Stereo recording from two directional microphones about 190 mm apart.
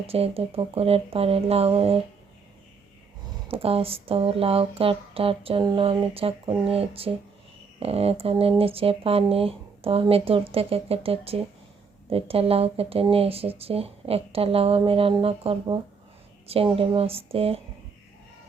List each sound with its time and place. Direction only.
0.1 s speech: 30° right (ahead or behind)
3.5 s speech: 30° right (ahead or behind)